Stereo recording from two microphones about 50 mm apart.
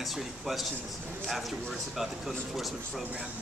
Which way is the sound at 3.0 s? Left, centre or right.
Right.